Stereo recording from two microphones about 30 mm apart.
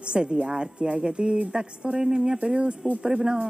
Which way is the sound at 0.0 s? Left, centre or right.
Right.